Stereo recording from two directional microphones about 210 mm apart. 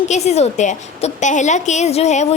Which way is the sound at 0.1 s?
30° left (ahead or behind).